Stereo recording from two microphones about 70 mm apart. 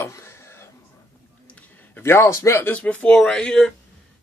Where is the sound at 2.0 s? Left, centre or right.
Left.